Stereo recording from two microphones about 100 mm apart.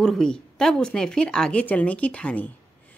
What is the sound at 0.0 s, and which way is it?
A woman's voice, 5° left (ahead or behind).